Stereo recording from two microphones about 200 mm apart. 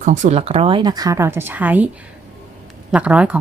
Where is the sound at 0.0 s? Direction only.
40° right (ahead or behind); by 1.9 s 10° right (ahead or behind).